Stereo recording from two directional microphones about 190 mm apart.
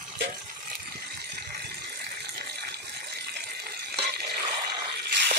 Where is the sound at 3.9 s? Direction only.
55° right (ahead or behind).